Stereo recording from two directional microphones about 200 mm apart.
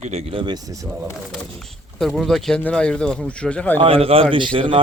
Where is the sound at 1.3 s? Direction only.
Centre (ahead or behind).